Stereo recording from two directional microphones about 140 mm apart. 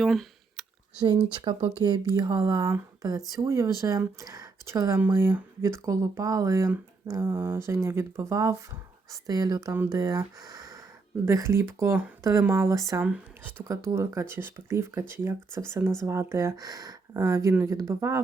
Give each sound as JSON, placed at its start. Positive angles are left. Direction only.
{"t": 0.0, "sound": "a sound", "side_deg": 0}
{"t": 1.4, "sound": "speech", "side_deg": -35}
{"t": 13.0, "sound": "speech", "side_deg": -15}